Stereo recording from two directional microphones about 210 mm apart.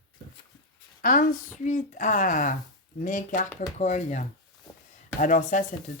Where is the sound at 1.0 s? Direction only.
40° left (ahead or behind).